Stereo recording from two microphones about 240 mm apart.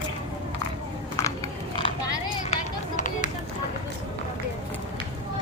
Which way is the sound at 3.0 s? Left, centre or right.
Left.